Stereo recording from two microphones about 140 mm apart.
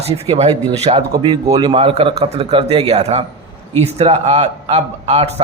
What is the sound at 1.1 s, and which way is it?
Speech, 25° right (ahead or behind).